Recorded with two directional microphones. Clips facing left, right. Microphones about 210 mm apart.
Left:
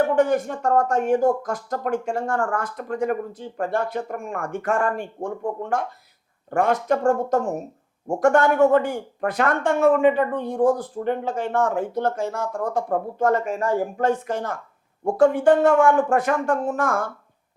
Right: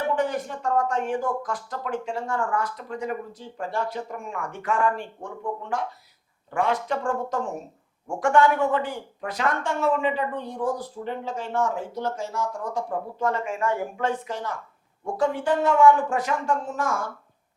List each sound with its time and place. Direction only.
0.2 s speech: 50° left (ahead or behind)